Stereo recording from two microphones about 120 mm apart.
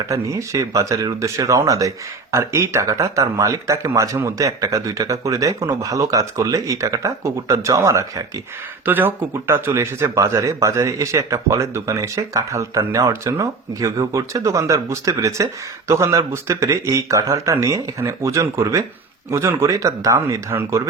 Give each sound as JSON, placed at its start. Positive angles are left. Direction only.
{"t": 0.1, "sound": "speech", "side_deg": -25}